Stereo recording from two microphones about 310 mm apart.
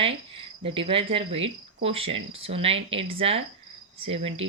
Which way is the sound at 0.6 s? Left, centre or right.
Centre.